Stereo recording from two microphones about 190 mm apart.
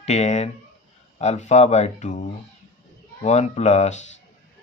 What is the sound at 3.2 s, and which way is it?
Speech, 35° left (ahead or behind).